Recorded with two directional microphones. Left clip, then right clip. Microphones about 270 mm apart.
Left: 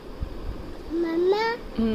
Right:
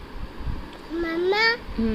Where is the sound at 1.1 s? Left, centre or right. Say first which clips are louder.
Right 2 dB; centre.